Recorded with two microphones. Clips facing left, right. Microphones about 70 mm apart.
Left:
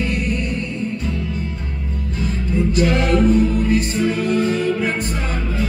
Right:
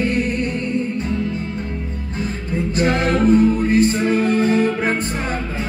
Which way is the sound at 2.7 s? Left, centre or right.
Right.